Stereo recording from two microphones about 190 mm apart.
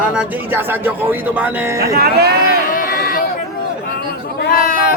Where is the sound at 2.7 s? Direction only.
50° left (ahead or behind).